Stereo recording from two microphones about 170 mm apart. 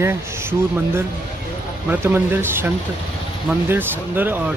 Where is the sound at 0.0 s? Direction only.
15° right (ahead or behind).